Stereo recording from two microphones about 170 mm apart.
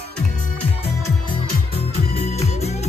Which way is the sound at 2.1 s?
40° left (ahead or behind).